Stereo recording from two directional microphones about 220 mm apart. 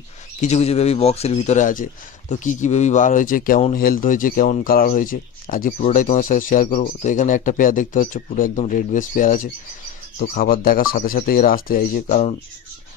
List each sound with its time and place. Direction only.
0.4 s speech: 30° left (ahead or behind)